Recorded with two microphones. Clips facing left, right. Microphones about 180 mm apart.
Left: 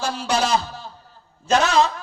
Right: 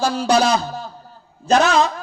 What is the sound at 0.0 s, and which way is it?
Speech, 40° right (ahead or behind).